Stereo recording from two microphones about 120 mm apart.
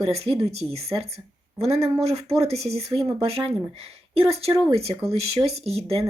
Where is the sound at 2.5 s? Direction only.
60° right (ahead or behind).